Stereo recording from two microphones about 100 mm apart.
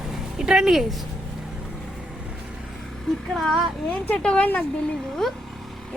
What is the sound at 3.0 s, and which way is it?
Speech, centre (ahead or behind).